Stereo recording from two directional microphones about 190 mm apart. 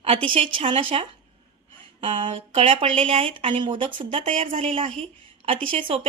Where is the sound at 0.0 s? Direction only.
30° right (ahead or behind).